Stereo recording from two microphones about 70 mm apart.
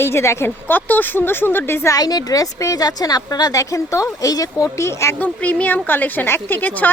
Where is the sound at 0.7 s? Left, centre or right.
Left.